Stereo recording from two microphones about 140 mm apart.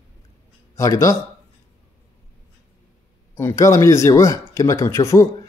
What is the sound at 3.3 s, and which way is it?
Speech, 20° left (ahead or behind).